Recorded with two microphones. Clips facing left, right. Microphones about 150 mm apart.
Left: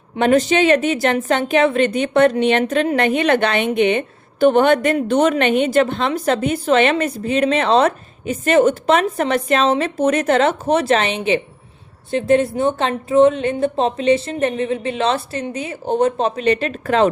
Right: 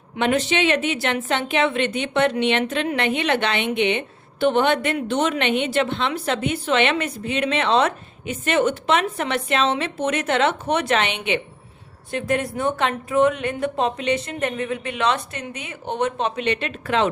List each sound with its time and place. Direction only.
0.2 s a woman's voice: 40° left (ahead or behind)